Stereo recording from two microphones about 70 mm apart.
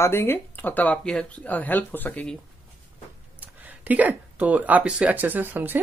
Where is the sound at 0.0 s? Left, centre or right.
Left.